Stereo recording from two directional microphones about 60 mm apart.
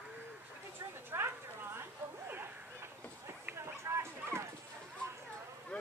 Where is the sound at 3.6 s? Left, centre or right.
Right.